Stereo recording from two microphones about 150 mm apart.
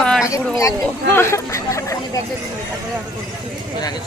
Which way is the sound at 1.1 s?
15° left (ahead or behind).